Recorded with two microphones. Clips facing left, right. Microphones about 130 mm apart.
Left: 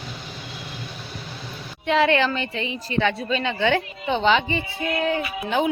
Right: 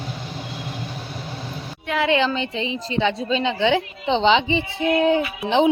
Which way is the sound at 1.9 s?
15° right (ahead or behind).